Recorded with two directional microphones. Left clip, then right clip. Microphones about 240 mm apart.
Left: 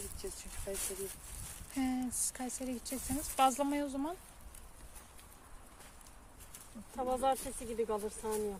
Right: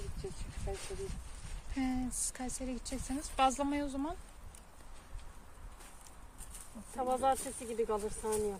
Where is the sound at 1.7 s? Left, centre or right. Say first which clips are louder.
Even; centre.